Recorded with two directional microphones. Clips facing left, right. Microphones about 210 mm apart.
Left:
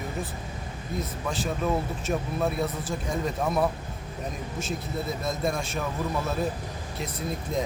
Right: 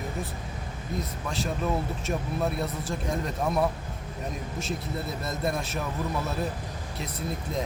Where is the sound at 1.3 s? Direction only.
Centre (ahead or behind).